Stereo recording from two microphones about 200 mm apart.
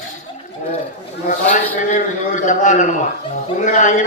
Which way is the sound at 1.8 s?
40° left (ahead or behind).